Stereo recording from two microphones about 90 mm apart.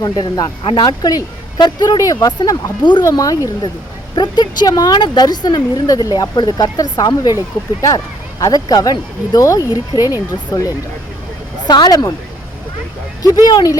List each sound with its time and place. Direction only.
0.0 s speech: 45° left (ahead or behind)
0.6 s speech: 80° left
1.0 s speech: 50° left (ahead or behind)
3.0 s speech: 40° left (ahead or behind)
4.1 s speech: 55° left (ahead or behind)
11.7 s speech: 50° left (ahead or behind)
13.2 s speech: 45° left (ahead or behind)